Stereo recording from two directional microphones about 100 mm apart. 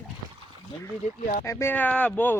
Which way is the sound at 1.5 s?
30° left (ahead or behind).